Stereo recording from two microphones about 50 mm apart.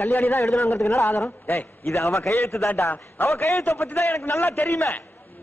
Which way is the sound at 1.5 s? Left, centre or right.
Left.